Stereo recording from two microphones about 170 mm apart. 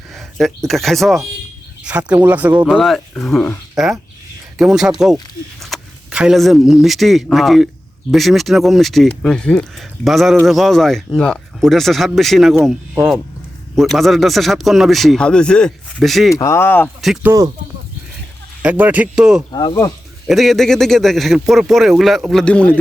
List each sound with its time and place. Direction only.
0.1 s speech: centre (ahead or behind)
16.3 s speech: 15° left (ahead or behind)
17.2 s speech: 20° right (ahead or behind)
18.6 s speech: 10° right (ahead or behind)
19.5 s speech: 25° left (ahead or behind)
20.2 s speech: centre (ahead or behind)